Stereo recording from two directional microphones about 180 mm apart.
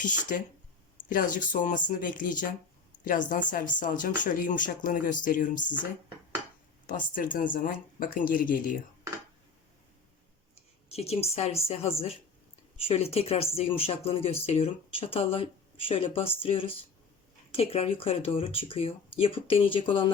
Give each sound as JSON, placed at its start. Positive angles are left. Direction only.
{"t": 0.0, "sound": "speech", "side_deg": 45}
{"t": 6.8, "sound": "speech", "side_deg": 45}
{"t": 10.9, "sound": "speech", "side_deg": 35}